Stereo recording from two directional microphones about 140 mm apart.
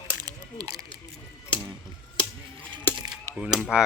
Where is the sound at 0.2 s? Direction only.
30° right (ahead or behind).